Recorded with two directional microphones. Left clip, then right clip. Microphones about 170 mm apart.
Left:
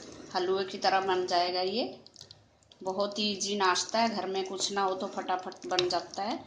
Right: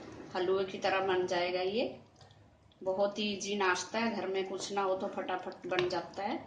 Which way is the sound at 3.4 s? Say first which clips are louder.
Left 4 dB; 45° left (ahead or behind).